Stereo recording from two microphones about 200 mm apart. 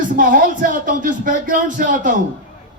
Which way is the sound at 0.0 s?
40° right (ahead or behind).